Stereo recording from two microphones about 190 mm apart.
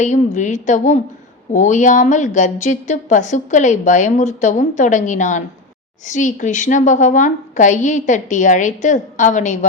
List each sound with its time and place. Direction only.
0.0 s a woman's voice: 40° left (ahead or behind)